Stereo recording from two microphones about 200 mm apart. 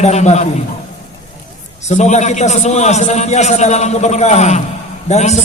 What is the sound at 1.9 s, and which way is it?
A man's voice, 35° left (ahead or behind).